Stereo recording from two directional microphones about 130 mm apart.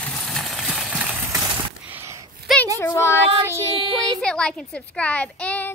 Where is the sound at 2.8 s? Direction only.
20° left (ahead or behind).